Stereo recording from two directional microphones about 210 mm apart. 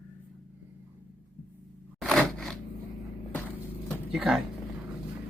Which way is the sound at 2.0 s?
Centre (ahead or behind).